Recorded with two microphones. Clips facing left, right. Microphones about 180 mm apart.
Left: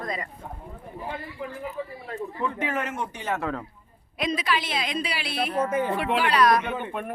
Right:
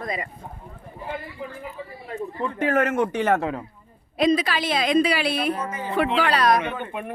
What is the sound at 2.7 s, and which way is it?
Speech, 60° right (ahead or behind).